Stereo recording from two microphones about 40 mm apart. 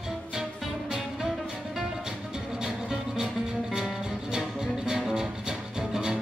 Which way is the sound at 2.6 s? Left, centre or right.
Centre.